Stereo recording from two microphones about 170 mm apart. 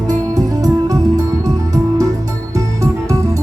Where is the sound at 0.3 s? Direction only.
20° right (ahead or behind).